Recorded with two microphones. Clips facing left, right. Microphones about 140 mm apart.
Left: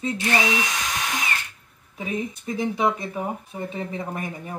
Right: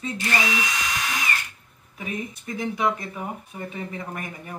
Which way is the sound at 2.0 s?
25° left (ahead or behind).